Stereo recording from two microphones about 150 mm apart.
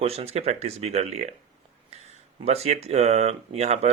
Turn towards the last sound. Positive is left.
turn(degrees=-45)  # may be behind; listen again after turning